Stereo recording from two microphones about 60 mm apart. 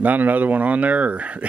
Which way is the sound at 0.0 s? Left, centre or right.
Right.